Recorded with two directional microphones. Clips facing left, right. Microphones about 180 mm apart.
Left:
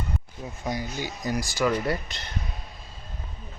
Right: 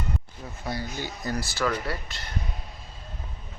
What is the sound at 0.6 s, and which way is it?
Speech, 15° left (ahead or behind).